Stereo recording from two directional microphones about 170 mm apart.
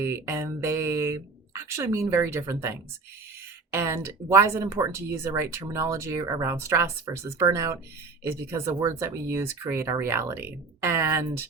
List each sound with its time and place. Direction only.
0.0 s speech: 15° right (ahead or behind)